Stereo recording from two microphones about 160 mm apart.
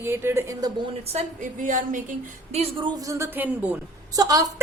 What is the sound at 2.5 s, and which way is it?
Speech, 40° right (ahead or behind).